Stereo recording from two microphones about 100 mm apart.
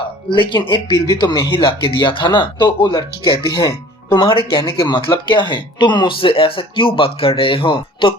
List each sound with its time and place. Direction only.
0.3 s speech: 60° left (ahead or behind)
1.0 s speech: 45° left (ahead or behind)
4.1 s speech: 45° left (ahead or behind)
4.4 s speech: 55° left (ahead or behind)